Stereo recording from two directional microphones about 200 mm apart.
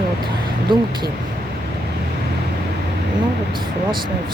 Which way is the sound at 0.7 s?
25° right (ahead or behind).